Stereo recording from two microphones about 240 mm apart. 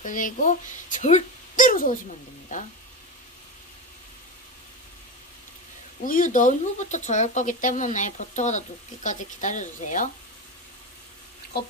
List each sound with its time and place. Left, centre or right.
0.0 s speech: left
6.0 s speech: left
11.5 s speech: left